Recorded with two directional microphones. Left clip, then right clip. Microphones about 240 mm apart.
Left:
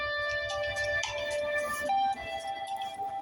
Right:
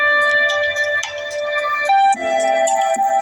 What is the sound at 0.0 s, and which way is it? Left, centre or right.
Music, right.